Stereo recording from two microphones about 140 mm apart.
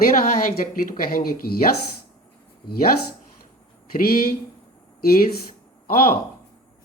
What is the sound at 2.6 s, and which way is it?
Speech, 90° left.